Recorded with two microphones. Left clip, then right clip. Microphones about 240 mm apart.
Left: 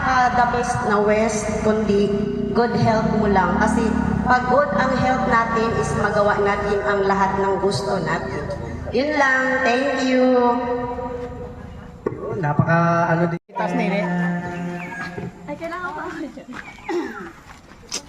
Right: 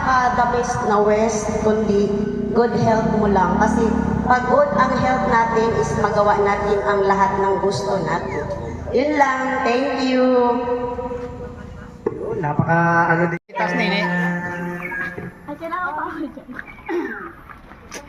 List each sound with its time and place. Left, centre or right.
0.0 s a woman's voice: left
12.4 s speech: left
14.3 s music: left